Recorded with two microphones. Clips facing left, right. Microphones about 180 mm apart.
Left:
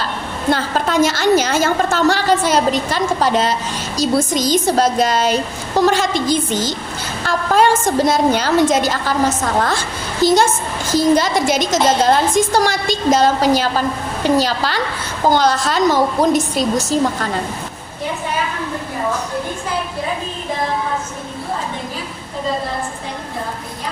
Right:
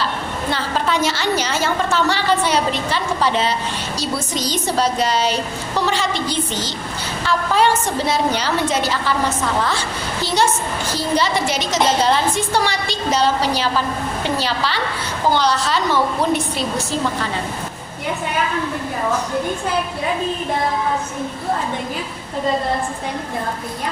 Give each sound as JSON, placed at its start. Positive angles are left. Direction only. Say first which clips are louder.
{"t": 0.5, "sound": "a woman's voice", "louder": "left 4 dB", "side_deg": 45}